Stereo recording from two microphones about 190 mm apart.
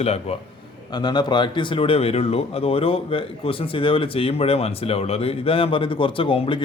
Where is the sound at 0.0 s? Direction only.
35° left (ahead or behind).